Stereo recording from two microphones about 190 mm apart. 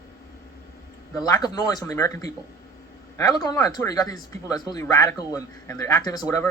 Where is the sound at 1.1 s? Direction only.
20° left (ahead or behind).